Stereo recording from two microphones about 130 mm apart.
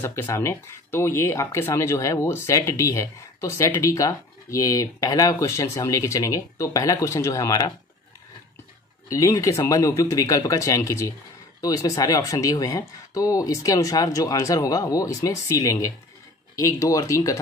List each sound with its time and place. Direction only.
0.0 s speech: 20° left (ahead or behind)
9.1 s speech: 25° left (ahead or behind)